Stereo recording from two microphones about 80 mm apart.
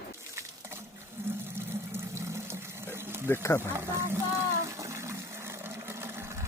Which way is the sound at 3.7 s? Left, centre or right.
Right.